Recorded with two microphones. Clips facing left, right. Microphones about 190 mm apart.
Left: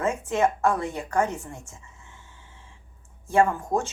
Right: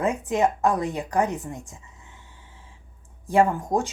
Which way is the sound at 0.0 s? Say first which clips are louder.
Right 1 dB; 15° right (ahead or behind).